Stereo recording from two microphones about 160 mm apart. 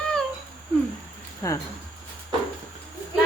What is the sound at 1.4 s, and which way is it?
Speech, 20° left (ahead or behind).